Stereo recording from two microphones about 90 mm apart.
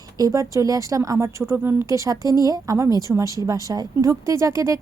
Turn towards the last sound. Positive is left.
turn(degrees=-35)  # may be behind; listen again after turning